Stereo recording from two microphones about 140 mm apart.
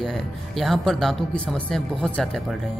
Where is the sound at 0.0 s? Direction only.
Centre (ahead or behind).